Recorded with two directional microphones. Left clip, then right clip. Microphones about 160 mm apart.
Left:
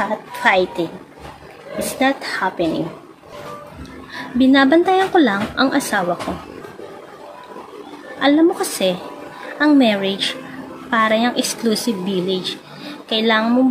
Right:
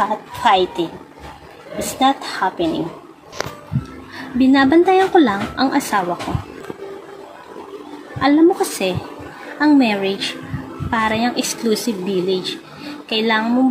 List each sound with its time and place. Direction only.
0.1 s a child's voice: 20° left (ahead or behind)
4.1 s speech: 15° left (ahead or behind)
8.2 s speech: 15° left (ahead or behind)